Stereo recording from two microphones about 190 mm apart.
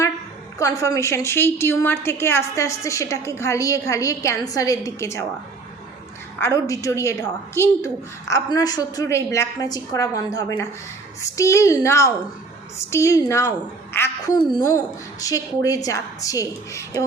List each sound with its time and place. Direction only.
0.6 s a woman's voice: 15° left (ahead or behind)
6.4 s a woman's voice: 15° left (ahead or behind)